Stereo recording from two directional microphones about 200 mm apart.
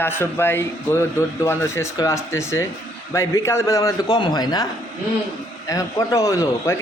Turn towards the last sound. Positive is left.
turn(degrees=15)  # may be behind; listen again after turning